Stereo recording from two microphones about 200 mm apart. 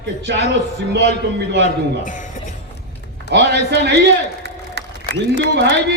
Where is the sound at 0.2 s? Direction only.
60° right (ahead or behind).